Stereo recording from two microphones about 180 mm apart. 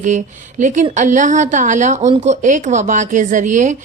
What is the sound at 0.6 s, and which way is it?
Speech, 45° right (ahead or behind).